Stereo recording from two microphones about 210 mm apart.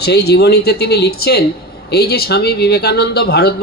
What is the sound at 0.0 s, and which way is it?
Speech, 50° left (ahead or behind).